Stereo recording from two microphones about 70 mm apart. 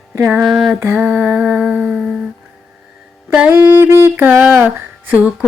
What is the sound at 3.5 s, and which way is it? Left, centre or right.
Speech, right.